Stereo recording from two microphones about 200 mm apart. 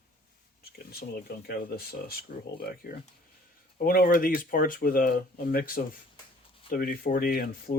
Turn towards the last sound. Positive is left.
turn(degrees=50)  # may be behind; listen again after turning